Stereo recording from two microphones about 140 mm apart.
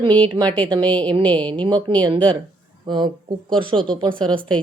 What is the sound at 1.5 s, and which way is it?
Speech, 30° right (ahead or behind).